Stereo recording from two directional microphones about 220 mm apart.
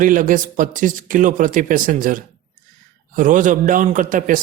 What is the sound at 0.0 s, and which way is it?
A man's voice, 35° right (ahead or behind).